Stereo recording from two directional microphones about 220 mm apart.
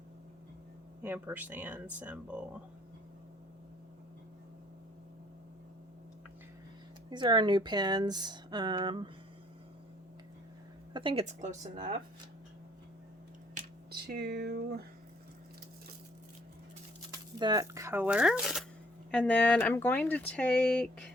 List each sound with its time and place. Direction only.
1.0 s speech: 10° right (ahead or behind)
7.1 s speech: 20° right (ahead or behind)
10.9 s speech: 25° right (ahead or behind)
11.6 s speech: 20° right (ahead or behind)
13.5 s finger snapping: 45° right (ahead or behind)
17.3 s speech: 20° right (ahead or behind); by 21.1 s 5° left (ahead or behind)